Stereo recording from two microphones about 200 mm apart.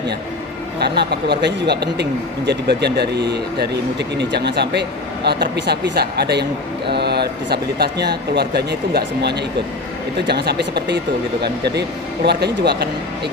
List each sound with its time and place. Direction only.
0.8 s speech: 55° right (ahead or behind)